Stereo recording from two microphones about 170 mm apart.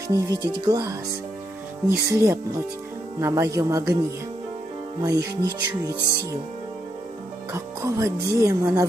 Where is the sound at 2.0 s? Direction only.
15° right (ahead or behind).